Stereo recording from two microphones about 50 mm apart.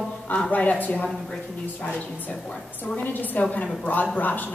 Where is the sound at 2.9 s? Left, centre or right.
Left.